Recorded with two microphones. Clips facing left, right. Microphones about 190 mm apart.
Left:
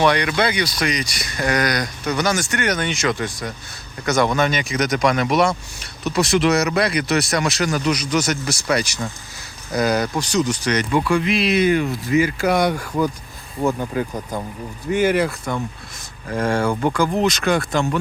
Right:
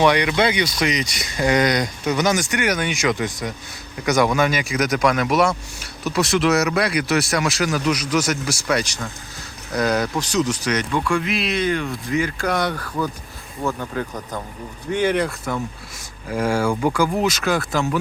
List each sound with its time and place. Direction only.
0.0 s speech: 15° right (ahead or behind); by 17.9 s centre (ahead or behind)